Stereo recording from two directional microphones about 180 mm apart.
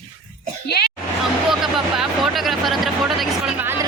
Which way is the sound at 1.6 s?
Centre (ahead or behind).